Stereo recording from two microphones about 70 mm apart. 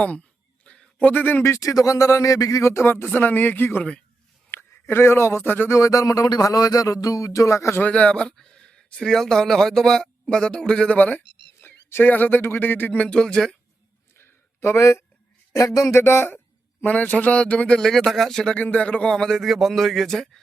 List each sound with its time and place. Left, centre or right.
0.0 s a sound: centre
1.5 s speech: left
5.7 s speech: left
7.8 s speech: centre
13.1 s speech: centre
14.2 s a sound: left
15.5 s speech: left; by 17.7 s centre
17.7 s a man's voice: centre
18.5 s a man's voice: left; by 20.4 s centre